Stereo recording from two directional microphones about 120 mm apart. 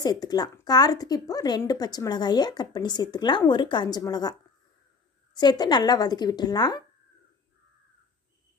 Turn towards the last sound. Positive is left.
turn(degrees=35)  # may be behind; listen again after turning